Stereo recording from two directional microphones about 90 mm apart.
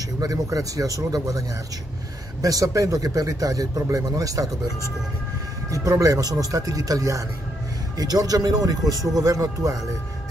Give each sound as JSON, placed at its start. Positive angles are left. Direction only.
{"t": 0.2, "sound": "speech", "side_deg": -40}
{"t": 2.4, "sound": "speech", "side_deg": -40}
{"t": 5.7, "sound": "speech", "side_deg": -40}